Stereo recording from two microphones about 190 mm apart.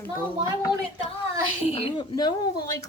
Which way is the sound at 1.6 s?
30° left (ahead or behind).